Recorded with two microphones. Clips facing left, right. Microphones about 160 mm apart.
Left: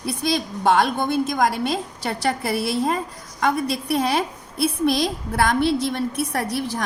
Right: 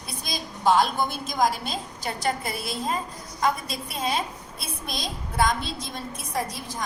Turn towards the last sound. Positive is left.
turn(degrees=70)  # may be behind; listen again after turning